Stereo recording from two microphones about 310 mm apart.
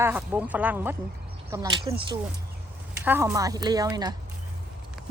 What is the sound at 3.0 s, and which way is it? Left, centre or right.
Speech, centre.